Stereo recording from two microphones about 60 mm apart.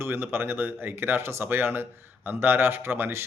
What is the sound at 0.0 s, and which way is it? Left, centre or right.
Speech, right.